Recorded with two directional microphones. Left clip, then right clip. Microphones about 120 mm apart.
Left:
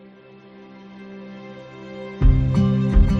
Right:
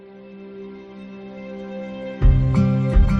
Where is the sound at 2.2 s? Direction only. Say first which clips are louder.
Left 3 dB; centre (ahead or behind).